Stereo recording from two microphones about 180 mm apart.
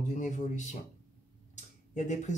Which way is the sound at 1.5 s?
40° left (ahead or behind).